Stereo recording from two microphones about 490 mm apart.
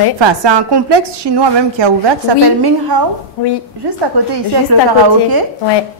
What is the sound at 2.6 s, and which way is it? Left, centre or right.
Speech, right.